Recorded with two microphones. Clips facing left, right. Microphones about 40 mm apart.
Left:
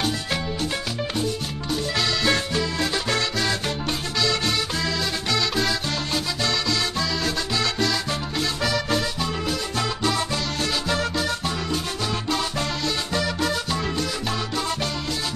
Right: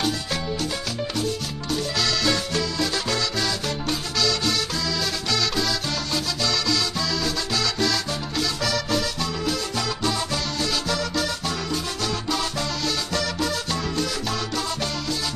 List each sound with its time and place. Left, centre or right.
2.0 s music: centre
5.3 s music: centre
10.6 s music: left
12.8 s music: centre